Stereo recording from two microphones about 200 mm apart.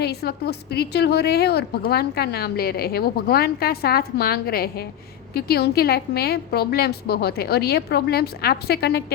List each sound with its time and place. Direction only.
0.0 s a woman's voice: 55° left (ahead or behind)